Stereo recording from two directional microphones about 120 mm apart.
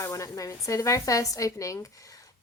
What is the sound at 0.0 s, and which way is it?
Speech, 25° left (ahead or behind).